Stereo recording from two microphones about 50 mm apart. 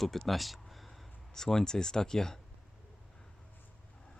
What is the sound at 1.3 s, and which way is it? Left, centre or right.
Speech, centre.